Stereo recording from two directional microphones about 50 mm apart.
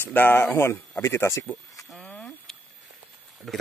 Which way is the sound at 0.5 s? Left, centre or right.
Left.